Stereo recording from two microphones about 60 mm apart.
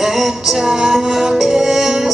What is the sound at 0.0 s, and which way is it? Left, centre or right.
Music, centre.